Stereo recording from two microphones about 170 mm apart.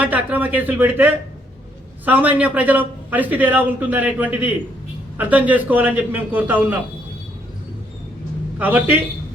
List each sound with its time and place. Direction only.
0.0 s a man's voice: 10° right (ahead or behind)
8.5 s a man's voice: 10° right (ahead or behind)